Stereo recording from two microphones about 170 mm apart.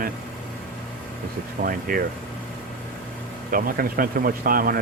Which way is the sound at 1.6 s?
55° right (ahead or behind).